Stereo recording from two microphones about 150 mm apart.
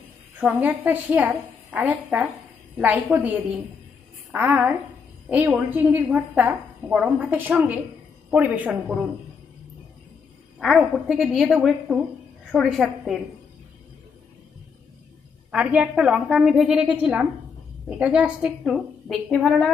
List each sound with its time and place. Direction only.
0.3 s a woman's voice: 10° right (ahead or behind)
10.6 s a woman's voice: centre (ahead or behind)
15.5 s a woman's voice: 10° right (ahead or behind)